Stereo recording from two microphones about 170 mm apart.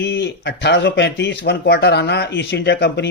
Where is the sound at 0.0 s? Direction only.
90° left.